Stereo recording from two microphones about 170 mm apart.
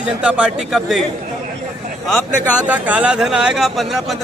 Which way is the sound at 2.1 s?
10° left (ahead or behind).